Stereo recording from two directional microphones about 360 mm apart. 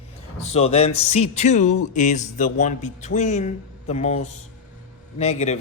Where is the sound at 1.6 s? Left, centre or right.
Left.